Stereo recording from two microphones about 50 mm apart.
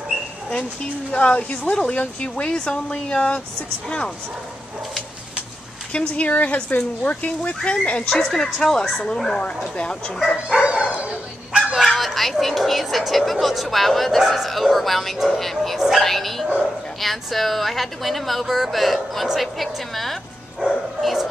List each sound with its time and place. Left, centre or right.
1.1 s speech: left
5.9 s speech: left
8.1 s a woman's voice: centre
10.5 s dog: right
11.7 s speech: centre
20.6 s bow-wow: centre